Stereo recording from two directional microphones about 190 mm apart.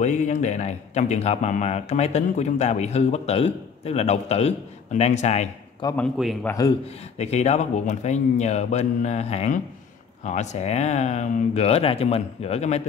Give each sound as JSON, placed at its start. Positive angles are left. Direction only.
{"t": 0.0, "sound": "speech", "side_deg": 40}
{"t": 5.8, "sound": "a man's voice", "side_deg": 20}
{"t": 7.2, "sound": "speech", "side_deg": 35}